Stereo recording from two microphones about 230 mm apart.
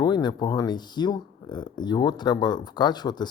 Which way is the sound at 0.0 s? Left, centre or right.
Centre.